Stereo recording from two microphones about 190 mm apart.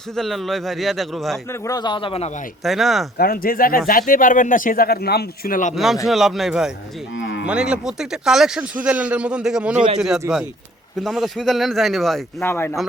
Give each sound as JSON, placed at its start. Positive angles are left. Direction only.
{"t": 0.2, "sound": "a man's voice", "side_deg": 0}
{"t": 1.6, "sound": "a man's voice", "side_deg": 20}
{"t": 2.6, "sound": "a man's voice", "side_deg": 0}
{"t": 3.2, "sound": "speech", "side_deg": 50}
{"t": 5.7, "sound": "a man's voice", "side_deg": 0}
{"t": 7.2, "sound": "moo", "side_deg": 75}
{"t": 7.4, "sound": "a man's voice", "side_deg": -5}
{"t": 9.7, "sound": "speech", "side_deg": -35}
{"t": 10.3, "sound": "a man's voice", "side_deg": -5}
{"t": 12.4, "sound": "speech", "side_deg": 10}